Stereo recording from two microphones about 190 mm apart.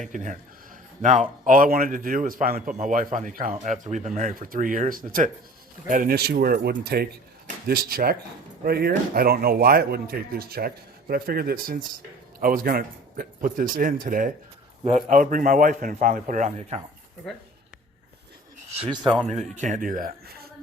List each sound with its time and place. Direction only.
0.1 s speech: 45° right (ahead or behind)
1.5 s speech: 45° right (ahead or behind)
18.7 s a man's voice: 25° right (ahead or behind); by 20.5 s 50° right (ahead or behind)